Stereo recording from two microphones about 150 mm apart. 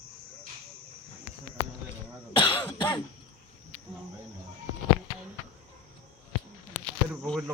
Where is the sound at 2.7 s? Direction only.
30° left (ahead or behind).